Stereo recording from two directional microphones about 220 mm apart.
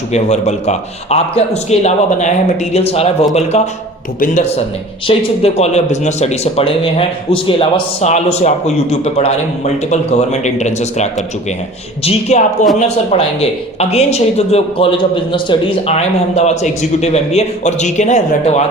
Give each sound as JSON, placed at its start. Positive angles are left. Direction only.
{"t": 0.1, "sound": "a man's voice", "side_deg": 30}